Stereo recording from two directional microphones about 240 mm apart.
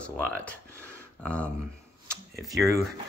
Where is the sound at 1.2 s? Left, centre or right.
Centre.